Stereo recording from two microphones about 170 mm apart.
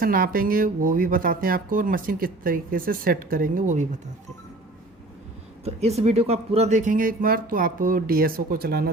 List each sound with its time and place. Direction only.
0.0 s speech: 55° right (ahead or behind)
6.0 s speech: 40° right (ahead or behind); by 8.9 s 65° right (ahead or behind)